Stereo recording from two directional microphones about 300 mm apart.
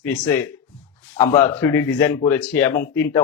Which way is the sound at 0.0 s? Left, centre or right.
Centre.